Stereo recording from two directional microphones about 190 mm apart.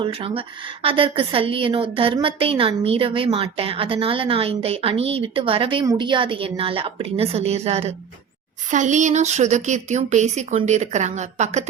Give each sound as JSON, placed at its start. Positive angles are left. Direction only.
{"t": 0.0, "sound": "a woman's voice", "side_deg": -30}